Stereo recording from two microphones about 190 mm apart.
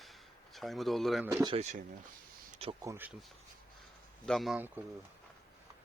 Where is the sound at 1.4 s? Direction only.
35° right (ahead or behind).